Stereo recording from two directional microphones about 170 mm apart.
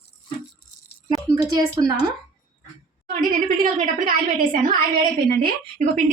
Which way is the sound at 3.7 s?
55° right (ahead or behind).